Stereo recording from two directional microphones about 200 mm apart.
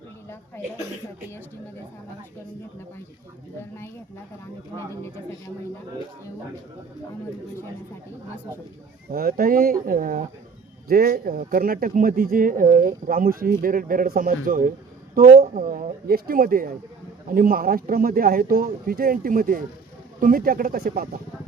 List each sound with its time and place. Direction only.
9.1 s speech: 45° right (ahead or behind)